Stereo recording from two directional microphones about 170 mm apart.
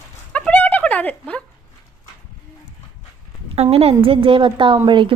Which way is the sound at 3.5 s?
35° right (ahead or behind).